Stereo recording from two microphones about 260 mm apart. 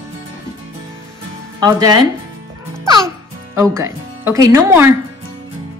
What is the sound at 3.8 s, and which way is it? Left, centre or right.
Speech, centre.